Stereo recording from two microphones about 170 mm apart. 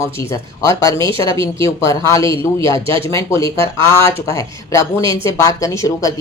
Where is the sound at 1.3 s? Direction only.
30° right (ahead or behind).